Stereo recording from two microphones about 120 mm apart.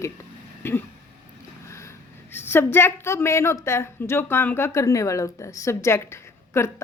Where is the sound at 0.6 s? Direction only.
15° left (ahead or behind).